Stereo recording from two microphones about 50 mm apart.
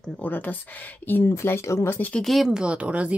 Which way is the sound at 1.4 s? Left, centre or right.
Left.